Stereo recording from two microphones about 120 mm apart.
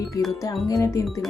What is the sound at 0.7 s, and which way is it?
Speech, 25° left (ahead or behind).